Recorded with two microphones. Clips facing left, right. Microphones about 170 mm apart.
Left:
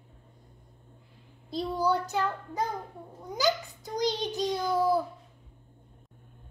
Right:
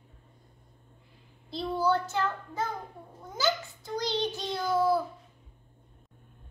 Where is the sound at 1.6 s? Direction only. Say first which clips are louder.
Even; 15° left (ahead or behind).